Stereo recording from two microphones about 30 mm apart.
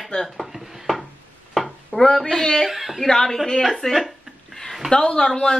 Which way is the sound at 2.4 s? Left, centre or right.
Centre.